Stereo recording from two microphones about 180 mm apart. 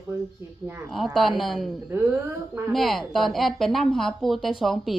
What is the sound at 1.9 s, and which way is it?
Speech, 10° right (ahead or behind).